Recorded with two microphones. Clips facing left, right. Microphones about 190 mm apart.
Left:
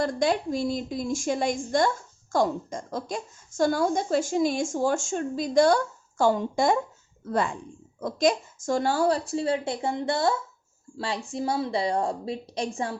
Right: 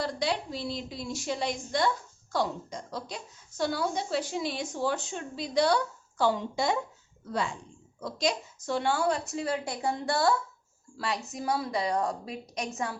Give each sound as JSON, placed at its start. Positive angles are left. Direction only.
{"t": 0.0, "sound": "a woman's voice", "side_deg": 50}